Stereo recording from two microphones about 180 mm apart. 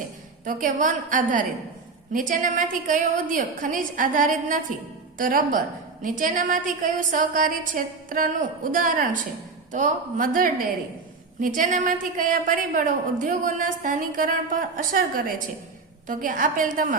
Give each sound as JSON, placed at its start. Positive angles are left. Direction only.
{"t": 0.4, "sound": "a woman's voice", "side_deg": -45}